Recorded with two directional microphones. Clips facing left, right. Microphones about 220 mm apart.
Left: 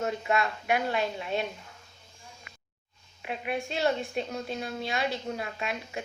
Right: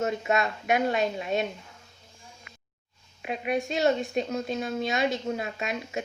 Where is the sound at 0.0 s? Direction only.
20° right (ahead or behind).